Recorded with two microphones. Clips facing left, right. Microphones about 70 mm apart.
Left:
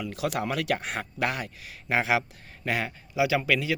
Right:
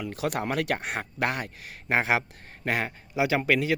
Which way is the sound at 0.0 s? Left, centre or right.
Right.